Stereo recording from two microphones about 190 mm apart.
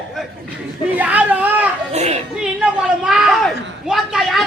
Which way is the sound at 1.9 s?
35° right (ahead or behind).